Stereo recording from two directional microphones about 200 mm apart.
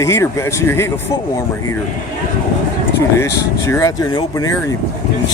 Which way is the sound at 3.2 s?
15° left (ahead or behind).